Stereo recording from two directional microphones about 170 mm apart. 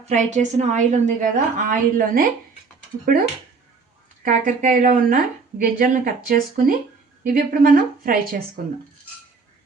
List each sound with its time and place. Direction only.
0.0 s a woman's voice: 40° right (ahead or behind)
4.2 s a woman's voice: 50° right (ahead or behind)